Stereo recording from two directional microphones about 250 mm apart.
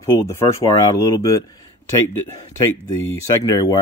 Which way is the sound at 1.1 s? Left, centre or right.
Centre.